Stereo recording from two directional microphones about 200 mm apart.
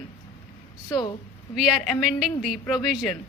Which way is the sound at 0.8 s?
20° left (ahead or behind).